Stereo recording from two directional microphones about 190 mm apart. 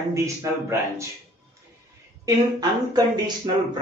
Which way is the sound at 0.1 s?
15° right (ahead or behind).